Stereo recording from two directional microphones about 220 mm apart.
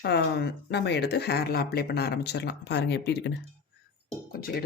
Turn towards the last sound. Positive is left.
turn(degrees=40)  # may be behind; listen again after turning